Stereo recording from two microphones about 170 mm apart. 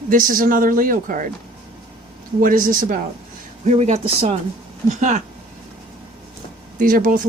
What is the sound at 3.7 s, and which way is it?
Speech, 40° right (ahead or behind).